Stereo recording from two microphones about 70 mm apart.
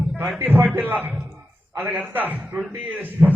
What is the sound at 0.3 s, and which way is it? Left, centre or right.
A man's voice, right.